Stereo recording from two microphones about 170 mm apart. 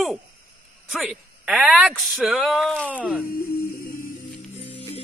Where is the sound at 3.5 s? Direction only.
60° left (ahead or behind).